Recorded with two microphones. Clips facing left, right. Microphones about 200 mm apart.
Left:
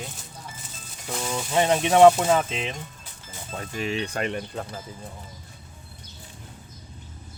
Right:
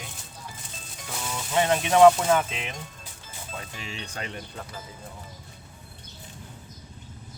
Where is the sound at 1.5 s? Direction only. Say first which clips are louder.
Left 2 dB; 25° left (ahead or behind).